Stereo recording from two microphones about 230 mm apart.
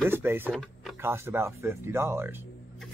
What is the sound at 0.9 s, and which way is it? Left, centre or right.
Speech, centre.